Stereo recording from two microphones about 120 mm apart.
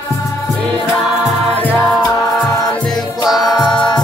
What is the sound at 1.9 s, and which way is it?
Music, centre (ahead or behind).